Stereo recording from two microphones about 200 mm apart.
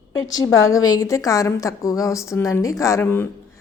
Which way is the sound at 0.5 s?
85° left.